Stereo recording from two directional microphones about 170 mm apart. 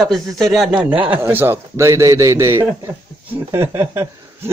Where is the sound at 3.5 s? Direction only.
15° right (ahead or behind).